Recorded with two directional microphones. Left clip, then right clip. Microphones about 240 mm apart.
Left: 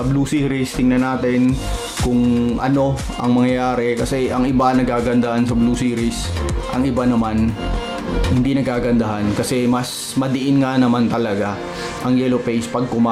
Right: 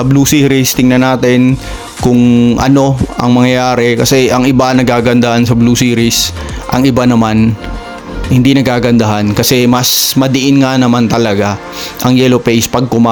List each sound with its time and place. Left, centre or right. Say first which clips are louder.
0.2 s speech: right 12 dB; right
2.4 s speech: right 9 dB; right
8.4 s speech: right 11 dB; right